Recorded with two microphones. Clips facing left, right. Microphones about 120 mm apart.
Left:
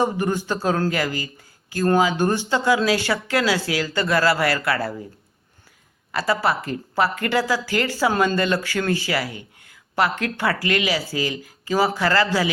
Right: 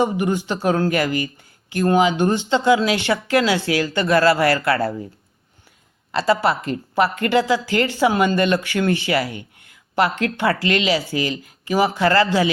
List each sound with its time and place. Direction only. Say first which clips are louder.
0.0 s speech: right 2 dB; 15° right (ahead or behind)
6.1 s a woman's voice: right 3 dB; 25° right (ahead or behind)